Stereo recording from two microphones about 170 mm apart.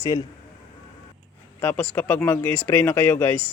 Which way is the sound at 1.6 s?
10° left (ahead or behind).